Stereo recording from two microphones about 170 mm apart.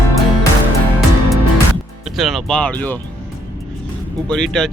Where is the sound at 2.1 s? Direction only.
Centre (ahead or behind).